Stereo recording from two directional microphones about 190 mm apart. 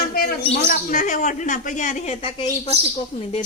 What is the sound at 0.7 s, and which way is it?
Speech, 40° left (ahead or behind).